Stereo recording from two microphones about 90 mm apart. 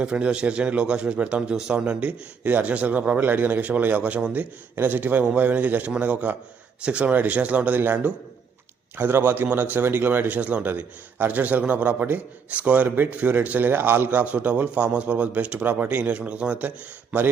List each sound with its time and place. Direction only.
0.0 s a man's voice: 15° right (ahead or behind)